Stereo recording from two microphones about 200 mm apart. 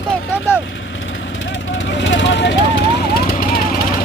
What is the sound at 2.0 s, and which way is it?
Vehicle, 65° left (ahead or behind).